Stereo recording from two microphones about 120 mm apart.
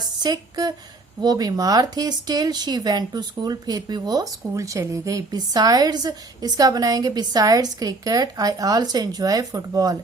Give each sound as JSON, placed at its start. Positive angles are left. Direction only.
{"t": 0.2, "sound": "a woman's voice", "side_deg": -35}